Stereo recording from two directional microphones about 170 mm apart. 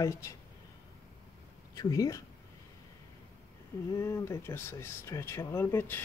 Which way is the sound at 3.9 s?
15° left (ahead or behind).